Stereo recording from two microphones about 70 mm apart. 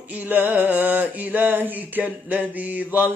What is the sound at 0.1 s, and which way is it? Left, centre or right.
A man's voice, right.